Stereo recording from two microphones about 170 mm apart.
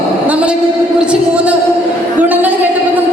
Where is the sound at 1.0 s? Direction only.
5° right (ahead or behind).